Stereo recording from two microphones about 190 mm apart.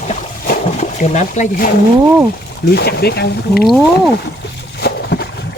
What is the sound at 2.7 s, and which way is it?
Speech, 55° left (ahead or behind).